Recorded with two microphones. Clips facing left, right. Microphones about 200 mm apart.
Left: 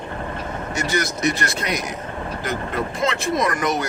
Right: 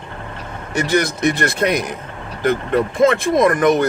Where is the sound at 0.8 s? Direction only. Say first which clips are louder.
Right 7 dB; 60° right (ahead or behind).